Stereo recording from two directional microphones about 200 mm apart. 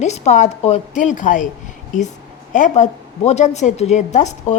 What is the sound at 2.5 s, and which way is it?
A woman's voice, 40° left (ahead or behind).